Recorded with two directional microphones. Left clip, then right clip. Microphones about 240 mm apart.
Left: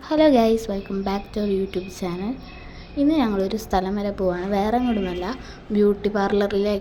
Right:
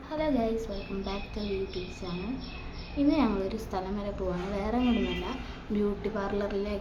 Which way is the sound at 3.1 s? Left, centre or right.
Left.